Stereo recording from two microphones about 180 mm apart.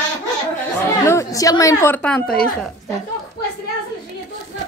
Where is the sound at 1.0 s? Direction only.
15° left (ahead or behind).